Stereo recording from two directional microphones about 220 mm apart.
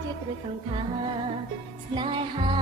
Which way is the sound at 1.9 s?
20° right (ahead or behind).